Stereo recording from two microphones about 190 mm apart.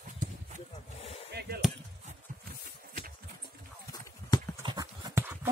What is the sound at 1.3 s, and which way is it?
Chop, 55° right (ahead or behind).